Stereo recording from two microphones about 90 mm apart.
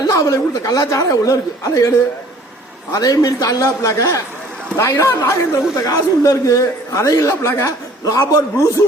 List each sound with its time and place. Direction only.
0.1 s a man's voice: 40° left (ahead or behind)